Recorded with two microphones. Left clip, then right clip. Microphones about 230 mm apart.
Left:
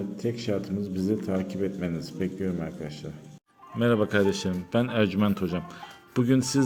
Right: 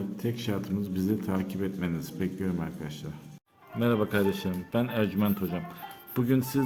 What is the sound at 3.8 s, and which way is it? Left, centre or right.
Speech, centre.